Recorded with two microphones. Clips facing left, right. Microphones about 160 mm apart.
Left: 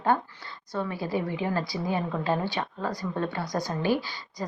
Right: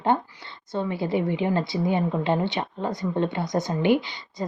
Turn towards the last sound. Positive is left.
turn(degrees=-20)  # may be behind; listen again after turning